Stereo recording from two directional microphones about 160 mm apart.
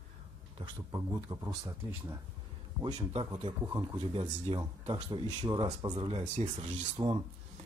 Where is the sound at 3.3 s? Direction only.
25° right (ahead or behind).